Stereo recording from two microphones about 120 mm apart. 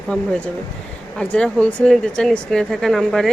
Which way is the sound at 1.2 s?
10° left (ahead or behind).